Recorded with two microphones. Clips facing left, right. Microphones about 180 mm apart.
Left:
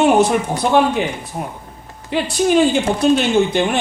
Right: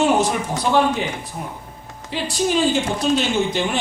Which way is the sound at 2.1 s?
60° left (ahead or behind).